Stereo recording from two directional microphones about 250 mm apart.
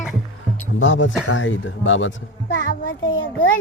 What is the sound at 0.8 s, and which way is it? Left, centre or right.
Speech, left.